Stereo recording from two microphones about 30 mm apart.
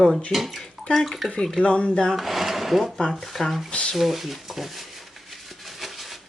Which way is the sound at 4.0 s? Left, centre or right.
Centre.